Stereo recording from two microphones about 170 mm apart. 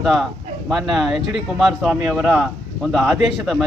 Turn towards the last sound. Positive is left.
turn(degrees=0)  # may be behind; listen again after turning